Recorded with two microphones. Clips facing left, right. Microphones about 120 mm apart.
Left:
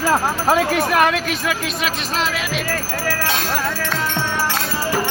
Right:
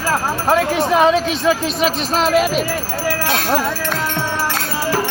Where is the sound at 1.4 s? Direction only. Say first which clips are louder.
Right 6 dB; 35° right (ahead or behind).